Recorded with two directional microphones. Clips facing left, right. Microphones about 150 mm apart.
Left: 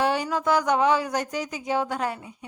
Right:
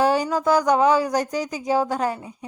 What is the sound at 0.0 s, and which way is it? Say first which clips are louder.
Speech: right 4 dB; 40° right (ahead or behind).